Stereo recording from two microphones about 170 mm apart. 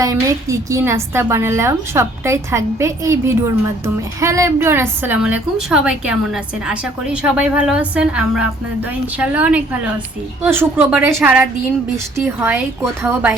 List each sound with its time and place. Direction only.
0.0 s a woman's voice: 20° right (ahead or behind)